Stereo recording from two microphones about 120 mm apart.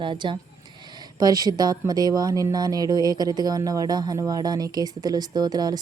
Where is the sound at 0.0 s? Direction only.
40° right (ahead or behind).